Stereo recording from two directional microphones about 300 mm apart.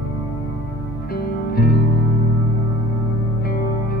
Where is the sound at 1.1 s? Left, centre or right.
Left.